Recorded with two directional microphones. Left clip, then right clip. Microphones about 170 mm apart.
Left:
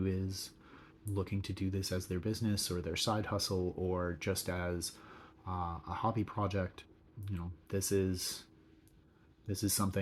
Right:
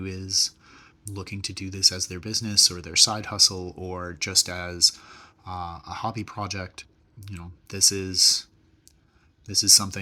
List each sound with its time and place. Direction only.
0.0 s speech: 15° right (ahead or behind)
3.8 s speech: 25° right (ahead or behind)
9.5 s speech: 15° right (ahead or behind)